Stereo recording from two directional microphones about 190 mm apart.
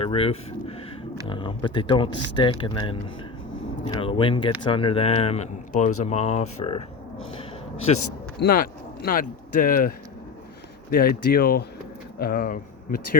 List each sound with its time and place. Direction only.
0.0 s speech: 30° left (ahead or behind)
7.9 s speech: 35° left (ahead or behind)
8.4 s speech: 50° left (ahead or behind)
10.9 s speech: 50° left (ahead or behind)